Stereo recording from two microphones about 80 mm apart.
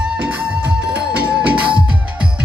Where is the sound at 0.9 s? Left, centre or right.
Centre.